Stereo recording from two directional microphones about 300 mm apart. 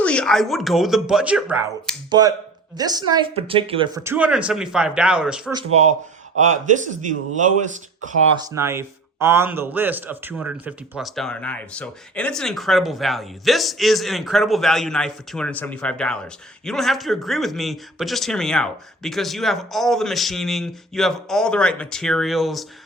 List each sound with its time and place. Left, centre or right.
0.0 s speech: centre
6.3 s speech: right
8.4 s speech: centre